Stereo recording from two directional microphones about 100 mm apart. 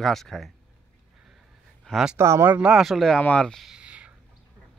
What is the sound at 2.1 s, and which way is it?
Speech, 25° right (ahead or behind).